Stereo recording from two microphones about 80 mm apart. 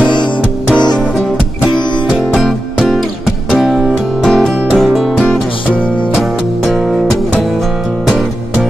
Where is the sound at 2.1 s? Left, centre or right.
Centre.